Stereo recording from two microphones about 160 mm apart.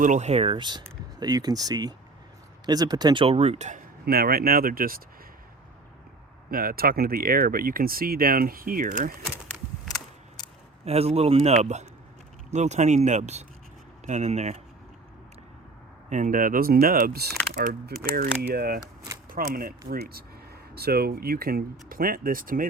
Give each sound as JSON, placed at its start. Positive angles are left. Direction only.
{"t": 0.0, "sound": "speech", "side_deg": -50}
{"t": 4.0, "sound": "speech", "side_deg": -75}
{"t": 6.5, "sound": "speech", "side_deg": -65}
{"t": 9.9, "sound": "a sound", "side_deg": 25}
{"t": 10.8, "sound": "speech", "side_deg": -40}
{"t": 16.0, "sound": "speech", "side_deg": -50}
{"t": 17.5, "sound": "speech", "side_deg": -60}
{"t": 18.8, "sound": "a sound", "side_deg": -20}
{"t": 19.3, "sound": "speech", "side_deg": -65}